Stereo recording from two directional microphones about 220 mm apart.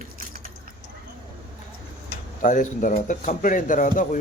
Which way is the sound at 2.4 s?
35° left (ahead or behind).